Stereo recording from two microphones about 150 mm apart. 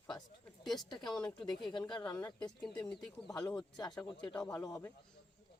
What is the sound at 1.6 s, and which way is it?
Speech, 30° left (ahead or behind).